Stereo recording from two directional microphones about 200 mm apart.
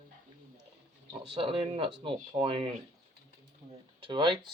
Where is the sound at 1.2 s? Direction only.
25° right (ahead or behind).